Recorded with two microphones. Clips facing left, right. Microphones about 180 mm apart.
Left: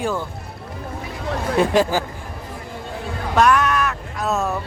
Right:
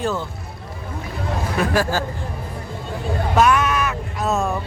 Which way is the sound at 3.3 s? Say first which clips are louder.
Left 1 dB; centre (ahead or behind).